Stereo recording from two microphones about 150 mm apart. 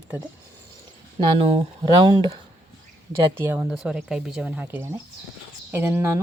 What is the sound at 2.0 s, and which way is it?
Speech, 30° right (ahead or behind).